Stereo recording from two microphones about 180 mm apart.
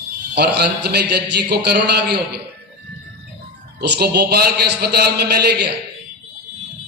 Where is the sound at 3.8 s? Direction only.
65° right (ahead or behind).